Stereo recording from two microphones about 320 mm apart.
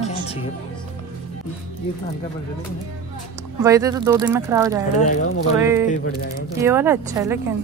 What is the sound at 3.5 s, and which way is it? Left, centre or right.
Speech, centre.